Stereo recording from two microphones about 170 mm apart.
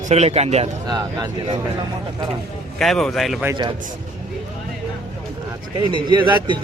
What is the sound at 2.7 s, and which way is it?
Speech, centre (ahead or behind).